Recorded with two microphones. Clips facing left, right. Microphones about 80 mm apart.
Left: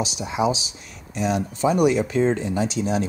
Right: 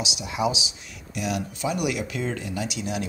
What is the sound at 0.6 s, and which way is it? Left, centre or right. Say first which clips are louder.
Speech: right 2 dB; left.